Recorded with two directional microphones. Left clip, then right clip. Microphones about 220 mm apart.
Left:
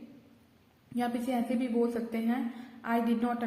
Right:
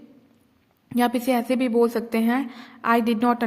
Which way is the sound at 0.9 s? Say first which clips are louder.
Right 10 dB; 50° right (ahead or behind).